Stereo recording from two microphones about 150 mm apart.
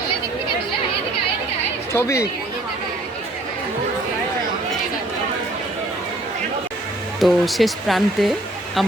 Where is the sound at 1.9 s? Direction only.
20° left (ahead or behind).